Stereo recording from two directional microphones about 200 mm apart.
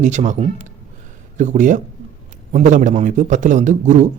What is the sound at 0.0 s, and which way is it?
A man's voice, 35° right (ahead or behind).